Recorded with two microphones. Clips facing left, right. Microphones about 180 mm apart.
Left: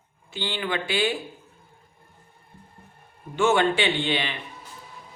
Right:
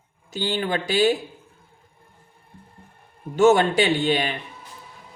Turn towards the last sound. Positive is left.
turn(degrees=-40)  # may be behind; listen again after turning